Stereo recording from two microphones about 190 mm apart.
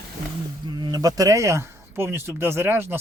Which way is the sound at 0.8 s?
20° right (ahead or behind).